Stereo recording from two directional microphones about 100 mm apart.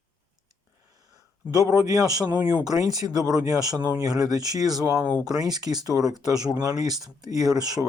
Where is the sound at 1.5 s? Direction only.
40° right (ahead or behind).